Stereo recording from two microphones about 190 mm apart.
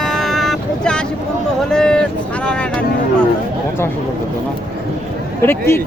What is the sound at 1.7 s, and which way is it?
Speech, 5° left (ahead or behind).